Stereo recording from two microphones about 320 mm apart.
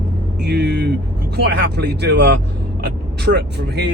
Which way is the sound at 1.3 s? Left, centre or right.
Right.